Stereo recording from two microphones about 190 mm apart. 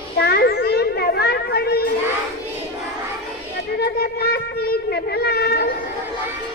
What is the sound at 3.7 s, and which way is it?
Child singing, 55° left (ahead or behind).